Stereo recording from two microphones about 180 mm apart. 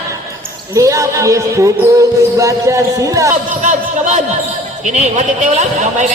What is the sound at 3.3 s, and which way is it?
Speech, 45° right (ahead or behind).